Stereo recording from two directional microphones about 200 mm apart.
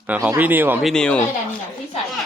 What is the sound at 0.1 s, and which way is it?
Speech, 10° right (ahead or behind).